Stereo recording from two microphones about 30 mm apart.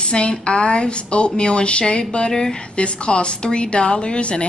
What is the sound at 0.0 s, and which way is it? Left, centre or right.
A woman's voice, left.